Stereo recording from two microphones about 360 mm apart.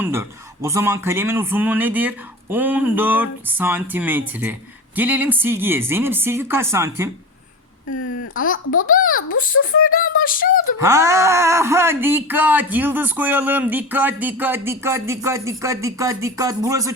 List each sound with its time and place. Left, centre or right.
0.0 s speech: centre
7.9 s a child's voice: left
10.8 s speech: centre